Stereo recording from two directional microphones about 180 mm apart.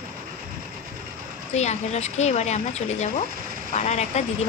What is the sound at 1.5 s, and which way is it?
Speech, 40° left (ahead or behind).